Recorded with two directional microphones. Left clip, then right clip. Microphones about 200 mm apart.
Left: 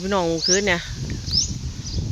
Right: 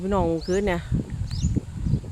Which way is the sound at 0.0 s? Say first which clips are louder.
Left 3 dB; 5° right (ahead or behind).